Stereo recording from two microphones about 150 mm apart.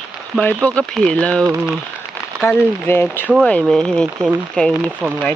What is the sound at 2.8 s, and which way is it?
Speech, 15° left (ahead or behind).